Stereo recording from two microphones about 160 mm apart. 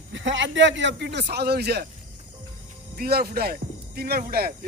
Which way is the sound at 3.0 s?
75° right (ahead or behind).